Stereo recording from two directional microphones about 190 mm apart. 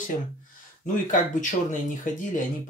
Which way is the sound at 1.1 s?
40° left (ahead or behind).